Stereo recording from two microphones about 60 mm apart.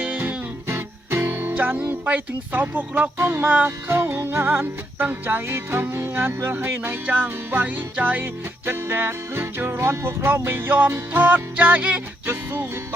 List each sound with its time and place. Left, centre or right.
0.0 s music: right
8.2 s music: right
12.3 s music: right